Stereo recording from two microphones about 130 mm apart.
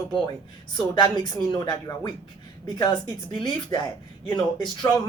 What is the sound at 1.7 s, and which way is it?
Speech, 35° left (ahead or behind).